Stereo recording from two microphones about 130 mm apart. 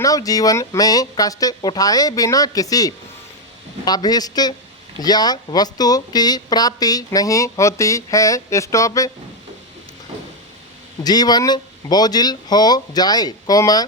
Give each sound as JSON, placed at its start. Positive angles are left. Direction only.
{"t": 0.0, "sound": "speech", "side_deg": 25}
{"t": 11.0, "sound": "speech", "side_deg": 30}